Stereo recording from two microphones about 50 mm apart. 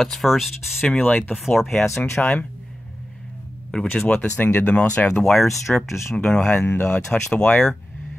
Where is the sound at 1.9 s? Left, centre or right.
Left.